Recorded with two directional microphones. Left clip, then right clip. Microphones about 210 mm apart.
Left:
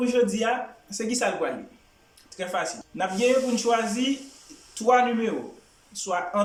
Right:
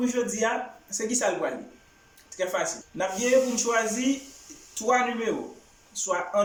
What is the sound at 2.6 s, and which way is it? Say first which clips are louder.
Speech: left 1 dB; 5° left (ahead or behind).